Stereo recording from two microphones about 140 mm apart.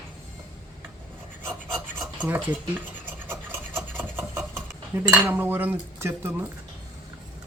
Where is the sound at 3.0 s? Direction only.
15° right (ahead or behind).